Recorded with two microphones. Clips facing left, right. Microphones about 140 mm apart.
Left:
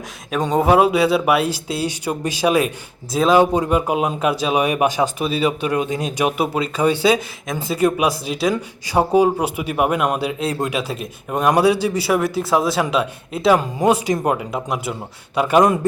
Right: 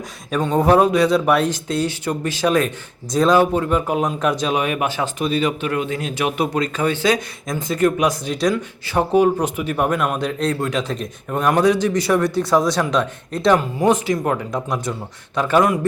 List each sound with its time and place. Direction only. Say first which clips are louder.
0.5 s speech: even; 5° left (ahead or behind)
3.3 s speech: left 1 dB; 15° left (ahead or behind)
6.3 s speech: even; 5° left (ahead or behind)
13.7 s speech: even; 20° left (ahead or behind)
14.5 s speech: even; 5° left (ahead or behind)